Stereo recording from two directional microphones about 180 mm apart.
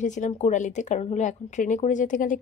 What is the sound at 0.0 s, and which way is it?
Speech, 40° left (ahead or behind).